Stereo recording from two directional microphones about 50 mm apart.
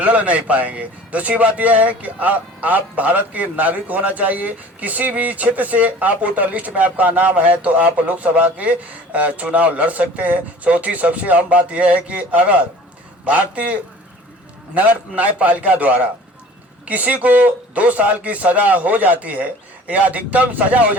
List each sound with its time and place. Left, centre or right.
0.0 s speech: right
14.8 s speech: right